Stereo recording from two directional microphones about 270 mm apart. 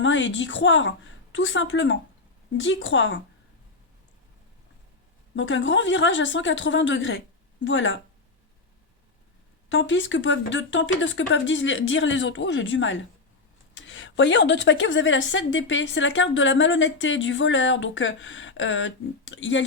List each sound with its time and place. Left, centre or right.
0.0 s a woman's voice: left
5.4 s a woman's voice: left
9.6 s a woman's voice: left